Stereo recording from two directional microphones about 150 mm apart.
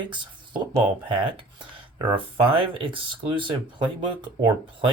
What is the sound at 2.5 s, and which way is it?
Speech, 35° right (ahead or behind).